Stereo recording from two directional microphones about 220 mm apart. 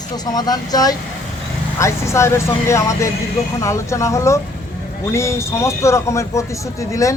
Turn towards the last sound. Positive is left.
turn(degrees=15)  # may be behind; listen again after turning